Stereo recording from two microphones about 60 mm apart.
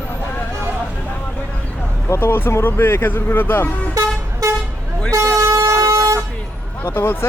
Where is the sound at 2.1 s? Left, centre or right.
Left.